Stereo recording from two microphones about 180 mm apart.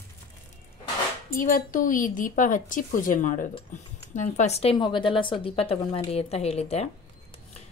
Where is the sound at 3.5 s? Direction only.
40° left (ahead or behind).